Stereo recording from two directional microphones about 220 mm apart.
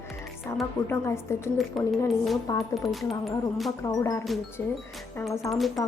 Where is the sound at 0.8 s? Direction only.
10° left (ahead or behind).